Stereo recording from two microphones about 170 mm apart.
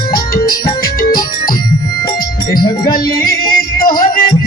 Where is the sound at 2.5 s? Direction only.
25° left (ahead or behind).